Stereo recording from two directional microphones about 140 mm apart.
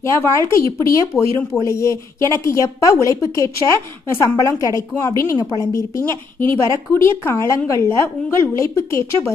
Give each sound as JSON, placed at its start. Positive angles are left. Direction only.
{"t": 0.0, "sound": "a woman's voice", "side_deg": 20}